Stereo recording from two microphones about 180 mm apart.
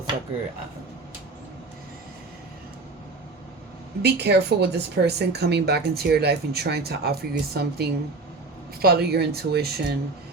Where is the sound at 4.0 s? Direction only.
70° right (ahead or behind).